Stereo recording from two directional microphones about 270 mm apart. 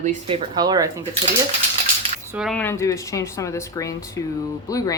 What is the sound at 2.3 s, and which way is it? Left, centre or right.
Speech, centre.